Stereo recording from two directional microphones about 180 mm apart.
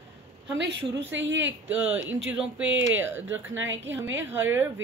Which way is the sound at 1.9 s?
10° right (ahead or behind).